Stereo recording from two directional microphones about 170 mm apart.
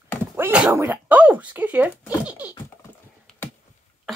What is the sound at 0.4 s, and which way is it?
Speech, 10° right (ahead or behind).